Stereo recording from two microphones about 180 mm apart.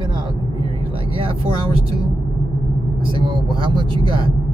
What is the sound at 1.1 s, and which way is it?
Vehicle, 30° right (ahead or behind).